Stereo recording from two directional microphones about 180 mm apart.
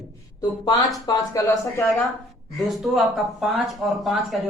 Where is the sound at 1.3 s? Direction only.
15° left (ahead or behind).